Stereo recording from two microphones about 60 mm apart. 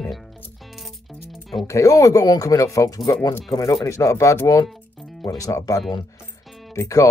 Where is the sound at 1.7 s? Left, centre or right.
Left.